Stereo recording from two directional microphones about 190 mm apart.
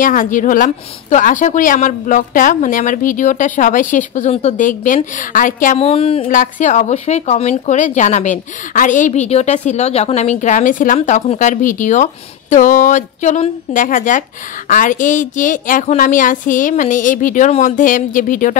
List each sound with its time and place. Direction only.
0.0 s a woman's voice: 45° left (ahead or behind)
6.2 s a woman's voice: 45° left (ahead or behind)